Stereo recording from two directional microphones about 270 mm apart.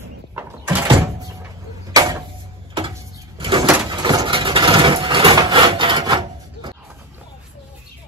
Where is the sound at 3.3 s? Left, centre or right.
Centre.